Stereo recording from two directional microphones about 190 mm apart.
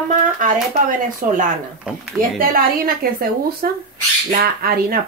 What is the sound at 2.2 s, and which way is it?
Speech, 50° right (ahead or behind).